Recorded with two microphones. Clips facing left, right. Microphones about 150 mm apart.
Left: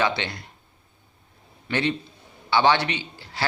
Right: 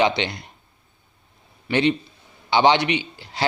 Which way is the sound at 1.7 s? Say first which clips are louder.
Right 5 dB; 15° right (ahead or behind).